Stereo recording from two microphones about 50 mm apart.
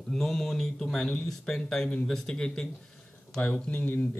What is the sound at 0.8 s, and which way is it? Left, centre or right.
Speech, centre.